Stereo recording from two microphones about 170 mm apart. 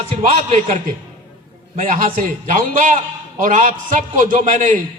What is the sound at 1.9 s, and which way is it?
A man's voice, 50° right (ahead or behind).